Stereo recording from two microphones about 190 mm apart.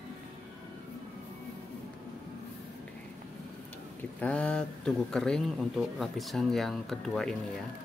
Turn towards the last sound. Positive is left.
turn(degrees=5)  # may be behind; listen again after turning